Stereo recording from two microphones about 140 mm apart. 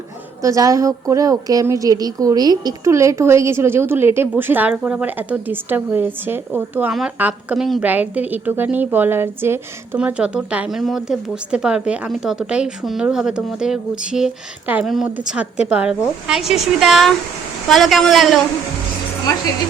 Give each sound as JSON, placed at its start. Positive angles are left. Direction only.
{"t": 0.4, "sound": "a woman's voice", "side_deg": -25}